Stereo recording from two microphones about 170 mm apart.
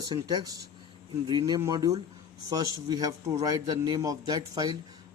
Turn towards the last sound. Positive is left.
turn(degrees=-20)  # may be behind; listen again after turning